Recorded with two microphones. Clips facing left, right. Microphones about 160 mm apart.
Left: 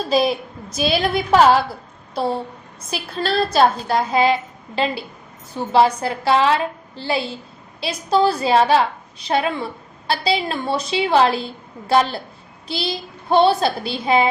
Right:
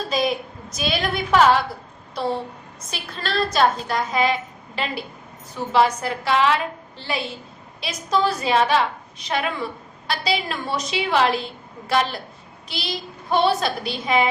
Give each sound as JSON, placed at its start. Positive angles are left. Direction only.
{"t": 0.1, "sound": "a woman's voice", "side_deg": 30}
{"t": 2.9, "sound": "a woman's voice", "side_deg": 35}
{"t": 12.6, "sound": "child singing", "side_deg": 30}
{"t": 13.3, "sound": "a woman's voice", "side_deg": 30}